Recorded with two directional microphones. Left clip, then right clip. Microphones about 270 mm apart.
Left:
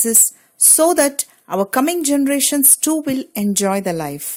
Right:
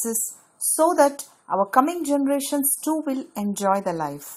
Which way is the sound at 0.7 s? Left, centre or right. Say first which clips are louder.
Left 3 dB; left.